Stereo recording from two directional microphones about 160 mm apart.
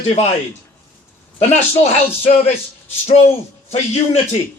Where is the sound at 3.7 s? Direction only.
40° left (ahead or behind).